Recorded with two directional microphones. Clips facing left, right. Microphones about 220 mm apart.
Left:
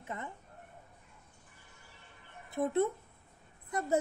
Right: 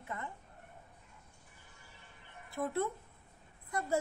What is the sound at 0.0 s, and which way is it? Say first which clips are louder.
Speech: left 1 dB; 20° left (ahead or behind).